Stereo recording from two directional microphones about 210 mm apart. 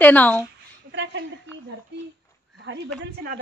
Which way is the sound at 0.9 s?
55° right (ahead or behind).